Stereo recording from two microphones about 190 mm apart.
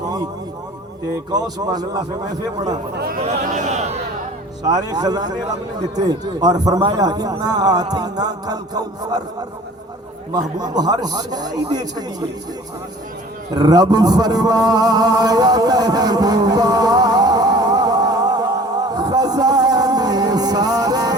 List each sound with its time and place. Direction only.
0.0 s a sound: 20° right (ahead or behind)
1.3 s a man's voice: 20° right (ahead or behind)
2.9 s speech: 55° right (ahead or behind)
3.2 s speech: 35° right (ahead or behind)
4.6 s a man's voice: 20° right (ahead or behind)
10.6 s a man's voice: 20° right (ahead or behind)
13.5 s a sound: 20° right (ahead or behind)